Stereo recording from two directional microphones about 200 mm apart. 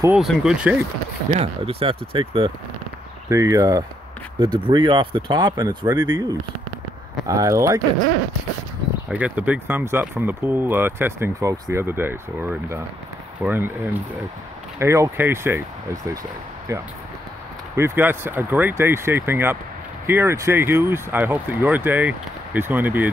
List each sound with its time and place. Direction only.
0.2 s speech: centre (ahead or behind)
1.3 s speech: 30° right (ahead or behind)
3.3 s speech: 15° right (ahead or behind)
9.1 s speech: 5° right (ahead or behind)